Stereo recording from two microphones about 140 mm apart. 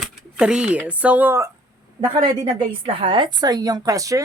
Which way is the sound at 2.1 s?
30° right (ahead or behind).